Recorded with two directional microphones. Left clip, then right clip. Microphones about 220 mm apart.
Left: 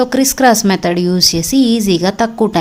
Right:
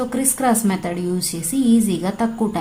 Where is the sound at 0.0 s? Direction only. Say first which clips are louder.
Left 9 dB; 35° left (ahead or behind).